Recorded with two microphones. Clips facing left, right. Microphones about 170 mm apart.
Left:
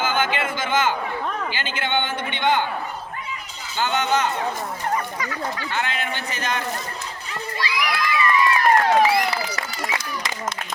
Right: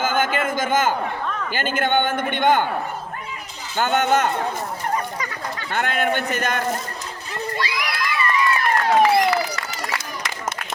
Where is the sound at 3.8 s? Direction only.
50° right (ahead or behind).